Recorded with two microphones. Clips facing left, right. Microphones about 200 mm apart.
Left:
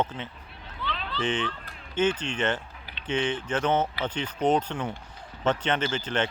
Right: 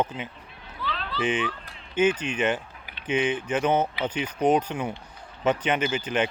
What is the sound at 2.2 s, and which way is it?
Speech, 15° right (ahead or behind).